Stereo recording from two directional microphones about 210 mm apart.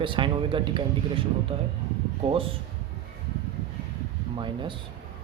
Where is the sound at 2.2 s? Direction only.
25° right (ahead or behind).